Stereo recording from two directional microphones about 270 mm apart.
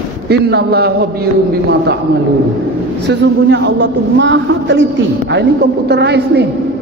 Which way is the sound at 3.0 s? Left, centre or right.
Right.